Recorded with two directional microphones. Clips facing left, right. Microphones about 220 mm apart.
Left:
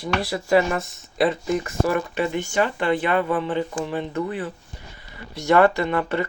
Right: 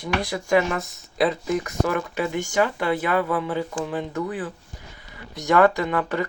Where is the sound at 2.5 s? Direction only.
10° right (ahead or behind).